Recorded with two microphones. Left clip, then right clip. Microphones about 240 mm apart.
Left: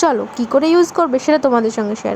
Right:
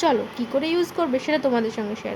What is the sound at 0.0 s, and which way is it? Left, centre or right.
A woman's voice, left.